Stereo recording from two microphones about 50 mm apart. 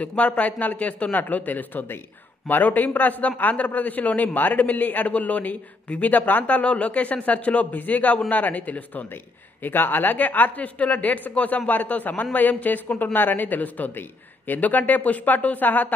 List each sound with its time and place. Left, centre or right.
0.0 s speech: left
9.6 s speech: left